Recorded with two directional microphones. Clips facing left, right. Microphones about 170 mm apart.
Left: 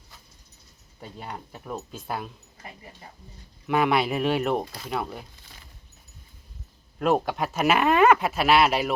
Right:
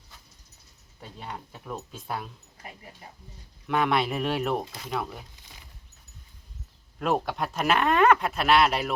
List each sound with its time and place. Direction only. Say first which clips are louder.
0.9 s speech: left 2 dB; centre (ahead or behind)
5.4 s a sound: left 1 dB; 15° right (ahead or behind)
7.0 s speech: left 3 dB; centre (ahead or behind)